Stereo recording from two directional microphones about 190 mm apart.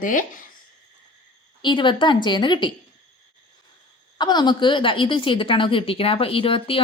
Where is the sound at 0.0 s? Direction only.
45° left (ahead or behind).